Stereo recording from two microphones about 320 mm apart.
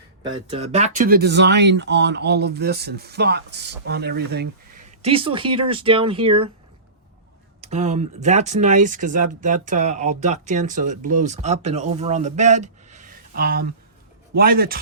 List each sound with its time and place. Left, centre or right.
0.2 s speech: centre
4.9 s speech: centre
7.6 s speech: right